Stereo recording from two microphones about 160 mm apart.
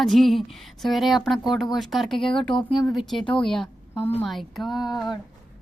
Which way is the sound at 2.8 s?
Centre (ahead or behind).